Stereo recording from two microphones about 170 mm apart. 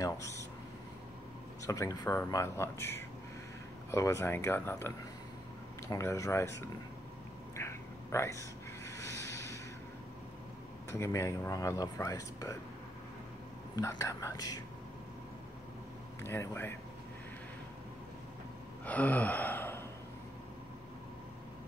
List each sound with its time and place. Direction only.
0.0 s air conditioning: 20° left (ahead or behind)
1.7 s speech: 20° left (ahead or behind)
7.5 s a sound: 15° left (ahead or behind)
10.9 s speech: 15° left (ahead or behind)
13.7 s speech: 20° left (ahead or behind)
16.2 s speech: 15° left (ahead or behind)
18.9 s speech: 10° left (ahead or behind)